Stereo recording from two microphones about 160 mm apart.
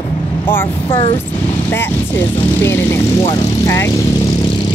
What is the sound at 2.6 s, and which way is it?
Speech, 15° left (ahead or behind).